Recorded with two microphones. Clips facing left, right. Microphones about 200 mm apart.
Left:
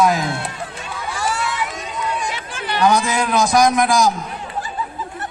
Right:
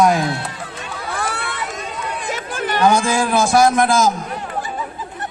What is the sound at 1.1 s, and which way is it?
Crowd, 60° right (ahead or behind).